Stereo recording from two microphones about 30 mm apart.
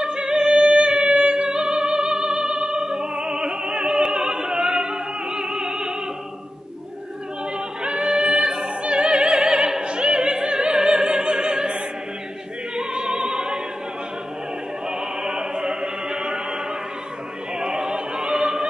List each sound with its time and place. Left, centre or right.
0.0 s music: right
7.8 s opera: right
14.9 s opera: right
17.6 s opera: right